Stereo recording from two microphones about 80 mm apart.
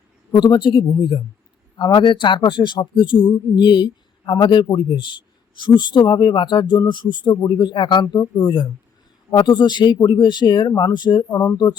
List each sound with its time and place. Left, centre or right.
0.3 s a man's voice: left
1.8 s a man's voice: left
9.3 s a man's voice: left
11.3 s speech: left